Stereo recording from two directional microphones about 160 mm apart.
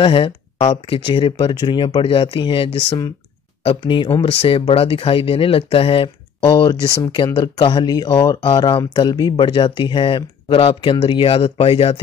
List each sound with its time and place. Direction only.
0.0 s speech: 35° left (ahead or behind)